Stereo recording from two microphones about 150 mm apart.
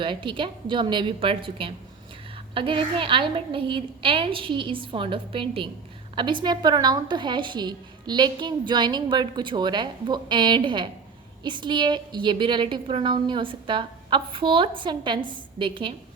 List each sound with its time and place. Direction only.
0.0 s a woman's voice: 35° right (ahead or behind)